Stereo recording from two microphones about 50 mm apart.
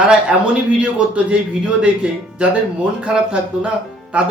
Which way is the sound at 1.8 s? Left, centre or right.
Right.